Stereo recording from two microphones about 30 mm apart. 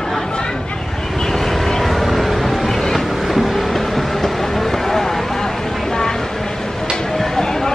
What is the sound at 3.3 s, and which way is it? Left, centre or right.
Vehicle, centre.